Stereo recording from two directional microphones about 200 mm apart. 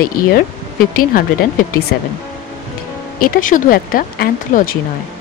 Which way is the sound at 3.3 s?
45° left (ahead or behind).